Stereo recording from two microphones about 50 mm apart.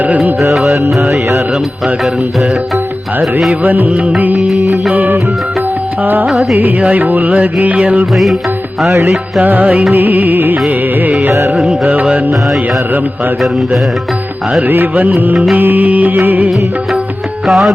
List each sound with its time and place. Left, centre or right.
0.0 s music: right
0.5 s music: centre
3.6 s music: right
6.0 s music: right
6.2 s music: centre
6.9 s music: right
8.1 s music: centre
9.4 s music: right
9.6 s music: centre
9.9 s music: right
11.3 s music: right
15.5 s music: right
17.4 s music: centre